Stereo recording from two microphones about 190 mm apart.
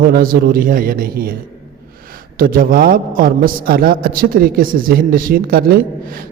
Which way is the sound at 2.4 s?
50° right (ahead or behind).